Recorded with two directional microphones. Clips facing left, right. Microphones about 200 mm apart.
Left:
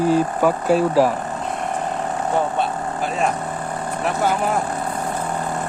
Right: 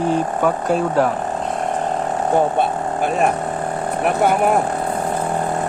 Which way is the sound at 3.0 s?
55° right (ahead or behind).